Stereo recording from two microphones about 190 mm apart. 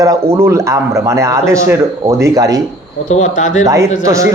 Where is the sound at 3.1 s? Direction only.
40° left (ahead or behind).